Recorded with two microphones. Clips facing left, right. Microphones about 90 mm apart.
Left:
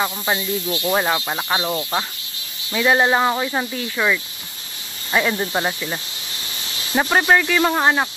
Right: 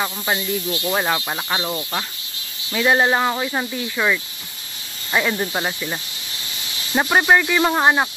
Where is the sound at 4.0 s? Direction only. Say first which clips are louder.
Even; 15° right (ahead or behind).